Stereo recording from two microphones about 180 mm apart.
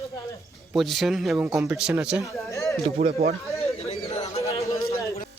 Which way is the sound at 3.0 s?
35° right (ahead or behind).